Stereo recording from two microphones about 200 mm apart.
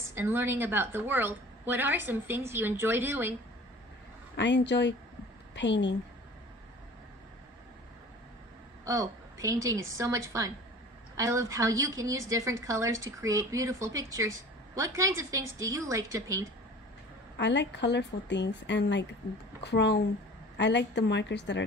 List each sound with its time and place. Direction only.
0.0 s a woman's voice: 10° right (ahead or behind)
4.4 s a woman's voice: 60° left (ahead or behind)
8.8 s a woman's voice: 15° right (ahead or behind)
17.4 s speech: 60° left (ahead or behind)